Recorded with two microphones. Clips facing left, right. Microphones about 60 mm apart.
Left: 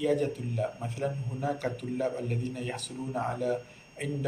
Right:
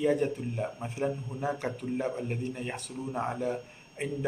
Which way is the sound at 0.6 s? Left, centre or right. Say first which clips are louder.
Left 1 dB; right.